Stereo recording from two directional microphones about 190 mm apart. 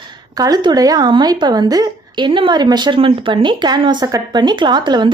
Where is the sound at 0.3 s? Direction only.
20° right (ahead or behind).